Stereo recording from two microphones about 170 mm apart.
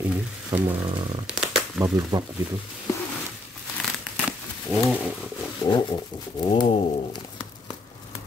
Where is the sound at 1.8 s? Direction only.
20° right (ahead or behind).